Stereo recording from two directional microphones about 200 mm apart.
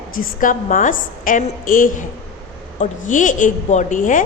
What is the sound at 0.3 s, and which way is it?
A woman's voice, 40° left (ahead or behind).